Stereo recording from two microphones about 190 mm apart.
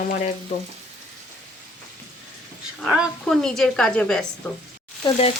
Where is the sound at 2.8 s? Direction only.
5° right (ahead or behind).